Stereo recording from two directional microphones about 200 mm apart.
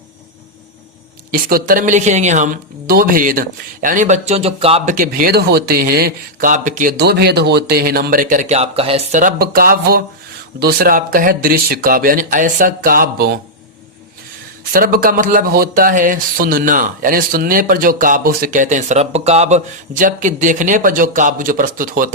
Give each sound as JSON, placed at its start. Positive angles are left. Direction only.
{"t": 1.3, "sound": "speech", "side_deg": -45}
{"t": 4.9, "sound": "speech", "side_deg": -45}
{"t": 14.7, "sound": "speech", "side_deg": -45}